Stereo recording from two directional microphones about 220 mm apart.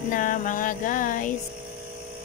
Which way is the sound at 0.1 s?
40° left (ahead or behind).